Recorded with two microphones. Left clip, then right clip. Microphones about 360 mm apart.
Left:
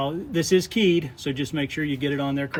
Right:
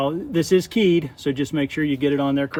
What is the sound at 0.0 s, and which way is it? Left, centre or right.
Speech, centre.